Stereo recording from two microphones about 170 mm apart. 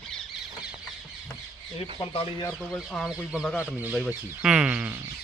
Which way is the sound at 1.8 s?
35° left (ahead or behind).